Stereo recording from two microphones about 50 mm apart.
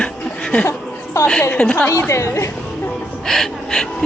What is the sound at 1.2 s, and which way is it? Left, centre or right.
Speech, left.